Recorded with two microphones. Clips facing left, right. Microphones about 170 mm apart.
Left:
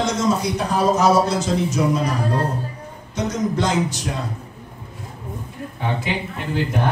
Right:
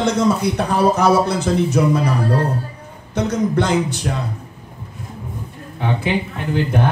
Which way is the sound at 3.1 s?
60° right (ahead or behind).